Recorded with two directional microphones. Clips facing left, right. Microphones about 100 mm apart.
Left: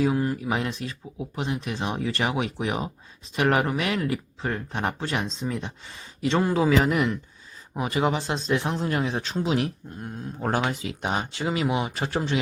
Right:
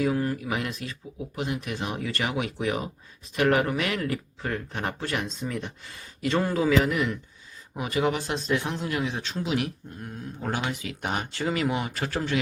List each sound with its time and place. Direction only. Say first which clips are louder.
0.0 s speech: left 2 dB; 20° left (ahead or behind)
11.0 s speech: left 1 dB; 20° left (ahead or behind)